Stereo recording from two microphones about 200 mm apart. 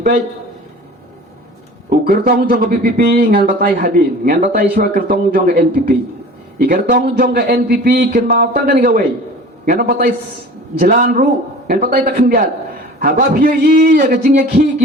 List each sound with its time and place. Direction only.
1.9 s speech: 50° right (ahead or behind)